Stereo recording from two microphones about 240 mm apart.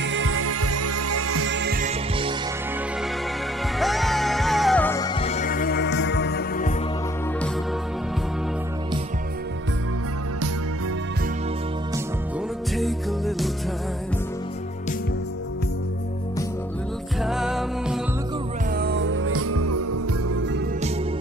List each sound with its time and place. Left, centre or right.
0.0 s music: right
1.9 s music: right
3.8 s music: centre; by 6.7 s left
12.7 s music: centre
17.2 s music: centre
18.8 s music: right